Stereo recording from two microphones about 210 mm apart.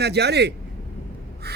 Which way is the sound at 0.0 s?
50° right (ahead or behind).